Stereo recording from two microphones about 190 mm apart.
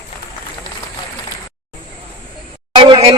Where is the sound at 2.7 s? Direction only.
30° right (ahead or behind).